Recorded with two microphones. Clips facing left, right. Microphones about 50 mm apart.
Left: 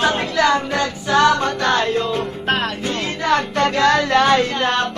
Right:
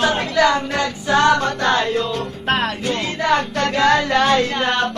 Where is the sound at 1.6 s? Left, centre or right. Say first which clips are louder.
Even; centre.